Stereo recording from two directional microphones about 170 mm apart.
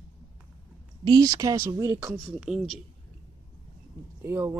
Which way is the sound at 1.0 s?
20° right (ahead or behind).